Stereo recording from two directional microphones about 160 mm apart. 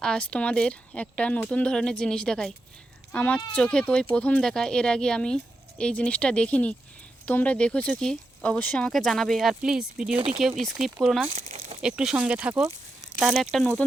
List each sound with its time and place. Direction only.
0.0 s speech: 5° left (ahead or behind)
11.3 s crumpling: 45° right (ahead or behind)
11.8 s speech: 5° right (ahead or behind)